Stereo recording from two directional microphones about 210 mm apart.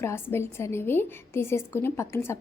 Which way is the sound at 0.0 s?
10° left (ahead or behind).